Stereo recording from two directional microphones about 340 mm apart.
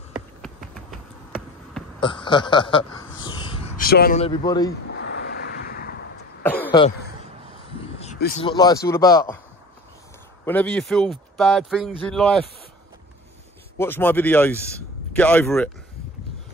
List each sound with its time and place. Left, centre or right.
0.1 s finger snapping: centre
2.0 s speech: centre
5.6 s vehicle: left
6.4 s cough: centre
8.0 s vehicle: left
8.5 s speech: centre
10.4 s speech: centre
13.7 s speech: centre